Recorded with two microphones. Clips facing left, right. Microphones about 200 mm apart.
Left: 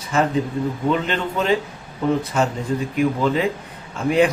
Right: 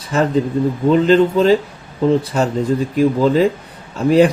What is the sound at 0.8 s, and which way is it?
A man's voice, 35° right (ahead or behind).